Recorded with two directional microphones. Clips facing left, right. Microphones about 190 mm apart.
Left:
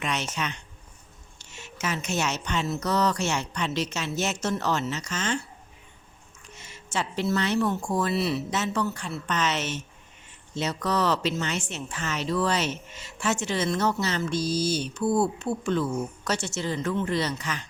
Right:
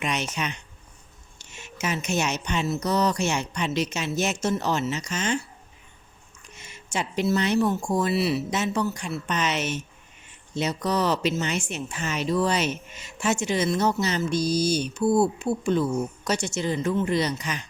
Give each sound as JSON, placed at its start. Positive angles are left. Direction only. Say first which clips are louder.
{"t": 0.0, "sound": "a woman's voice", "louder": "right 2 dB", "side_deg": -15}
{"t": 6.6, "sound": "speech", "louder": "right 1 dB", "side_deg": -15}